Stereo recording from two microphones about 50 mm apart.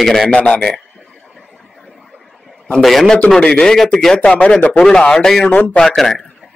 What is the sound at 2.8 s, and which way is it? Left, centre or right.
Speech, centre.